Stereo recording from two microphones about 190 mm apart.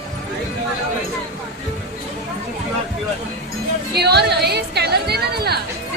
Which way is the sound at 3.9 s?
60° right (ahead or behind).